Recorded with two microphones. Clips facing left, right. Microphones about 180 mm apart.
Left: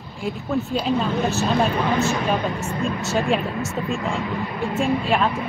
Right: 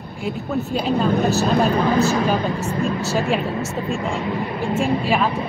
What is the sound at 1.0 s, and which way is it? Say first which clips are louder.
Speech: right 4 dB; 35° right (ahead or behind).